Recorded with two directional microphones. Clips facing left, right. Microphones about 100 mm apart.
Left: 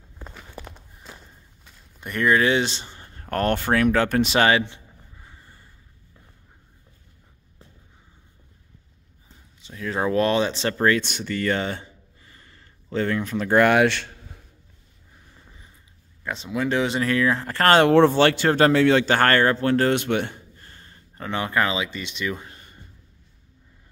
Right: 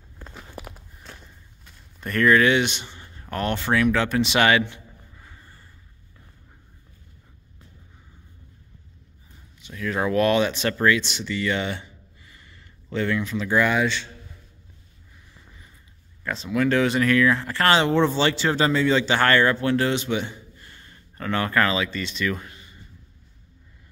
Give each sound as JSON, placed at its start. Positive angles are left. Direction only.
{"t": 0.5, "sound": "walk", "side_deg": -10}
{"t": 2.0, "sound": "speech", "side_deg": 15}
{"t": 9.6, "sound": "speech", "side_deg": 25}
{"t": 11.0, "sound": "speech", "side_deg": 50}
{"t": 16.3, "sound": "speech", "side_deg": 20}
{"t": 21.2, "sound": "speech", "side_deg": 20}
{"t": 22.5, "sound": "a sound", "side_deg": 45}